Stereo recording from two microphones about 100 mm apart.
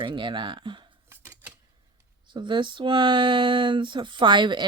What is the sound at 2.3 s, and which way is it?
Speech, 50° right (ahead or behind).